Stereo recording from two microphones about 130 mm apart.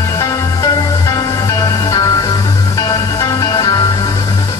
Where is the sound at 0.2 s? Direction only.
25° left (ahead or behind).